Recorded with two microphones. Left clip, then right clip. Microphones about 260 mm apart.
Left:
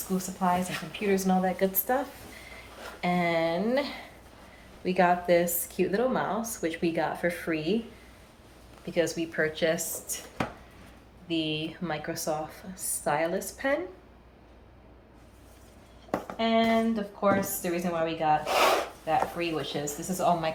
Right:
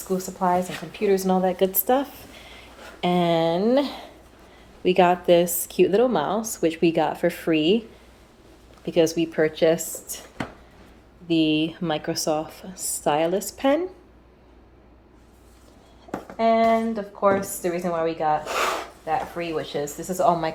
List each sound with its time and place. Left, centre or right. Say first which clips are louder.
0.3 s a woman's voice: right 4 dB; right
8.9 s a woman's voice: right 8 dB; right
11.3 s speech: right 9 dB; right
16.4 s a woman's voice: right 7 dB; right